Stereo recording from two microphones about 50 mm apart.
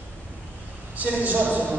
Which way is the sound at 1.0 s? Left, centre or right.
Right.